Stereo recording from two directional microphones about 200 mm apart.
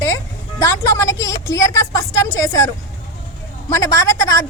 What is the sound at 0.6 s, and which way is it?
Speech, 15° left (ahead or behind).